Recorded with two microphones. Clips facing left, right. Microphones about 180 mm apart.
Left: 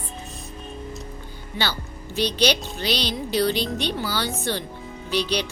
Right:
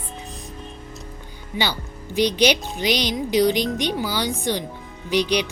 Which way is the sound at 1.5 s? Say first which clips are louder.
Right 3 dB; 15° right (ahead or behind).